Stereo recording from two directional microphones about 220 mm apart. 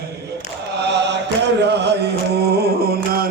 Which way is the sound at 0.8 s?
50° right (ahead or behind).